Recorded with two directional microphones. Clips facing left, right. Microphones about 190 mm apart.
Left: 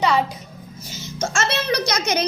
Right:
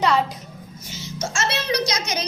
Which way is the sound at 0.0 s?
Centre (ahead or behind).